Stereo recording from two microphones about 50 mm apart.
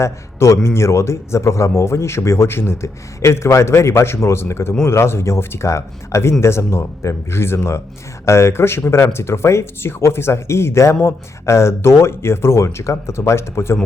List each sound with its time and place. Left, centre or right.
0.0 s a man's voice: left
5.6 s a man's voice: left
6.4 s speech: left